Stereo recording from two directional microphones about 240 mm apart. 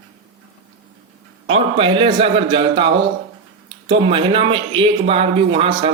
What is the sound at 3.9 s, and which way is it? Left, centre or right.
Speech, right.